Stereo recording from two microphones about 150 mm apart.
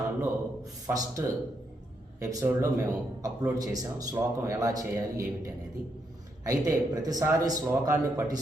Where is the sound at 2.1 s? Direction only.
15° right (ahead or behind).